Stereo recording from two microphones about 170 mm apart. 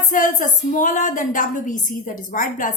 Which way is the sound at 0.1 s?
50° left (ahead or behind).